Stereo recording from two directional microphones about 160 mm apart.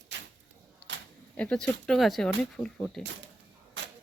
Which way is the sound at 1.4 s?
5° left (ahead or behind).